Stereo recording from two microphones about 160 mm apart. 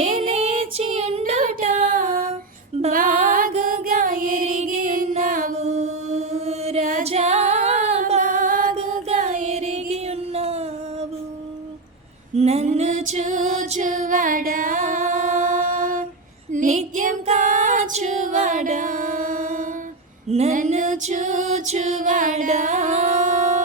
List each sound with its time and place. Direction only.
0.0 s music: 35° right (ahead or behind)
1.3 s a sound: 40° right (ahead or behind)
3.2 s music: 60° right (ahead or behind)
5.5 s mantra: 45° right (ahead or behind)
7.0 s female singing: 40° right (ahead or behind)
12.4 s music: 40° right (ahead or behind)
16.5 s female singing: 50° right (ahead or behind)
20.3 s music: 50° right (ahead or behind)